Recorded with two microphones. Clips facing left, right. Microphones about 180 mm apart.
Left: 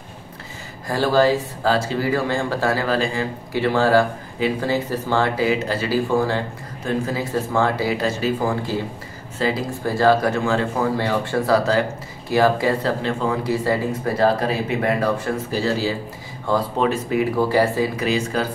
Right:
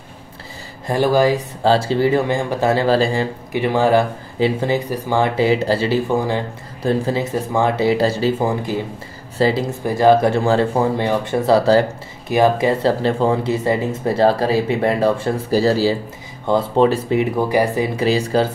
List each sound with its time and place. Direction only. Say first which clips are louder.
0.8 s speech: right 2 dB; 20° right (ahead or behind)
1.6 s speech: right 5 dB; 30° right (ahead or behind)
3.5 s speech: right 2 dB; 15° right (ahead or behind)
5.4 s speech: right 5 dB; 30° right (ahead or behind)
6.1 s speech: right 1 dB; 15° right (ahead or behind)
6.8 s speech: right 5 dB; 30° right (ahead or behind)
10.3 s speech: right 5 dB; 35° right (ahead or behind)
11.0 s speech: right 3 dB; 20° right (ahead or behind)
12.3 s speech: right 2 dB; 20° right (ahead or behind)
13.0 s speech: right 5 dB; 30° right (ahead or behind)